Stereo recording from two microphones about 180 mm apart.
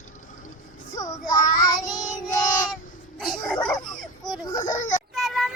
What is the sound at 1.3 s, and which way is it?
Child singing, 20° left (ahead or behind).